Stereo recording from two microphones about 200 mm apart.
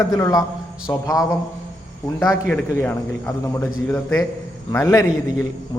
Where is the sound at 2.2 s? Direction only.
10° left (ahead or behind).